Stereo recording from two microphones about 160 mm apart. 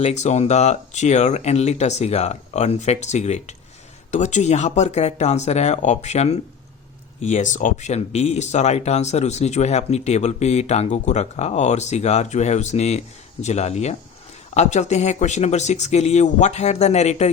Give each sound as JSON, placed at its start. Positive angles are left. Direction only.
{"t": 0.0, "sound": "speech", "side_deg": 45}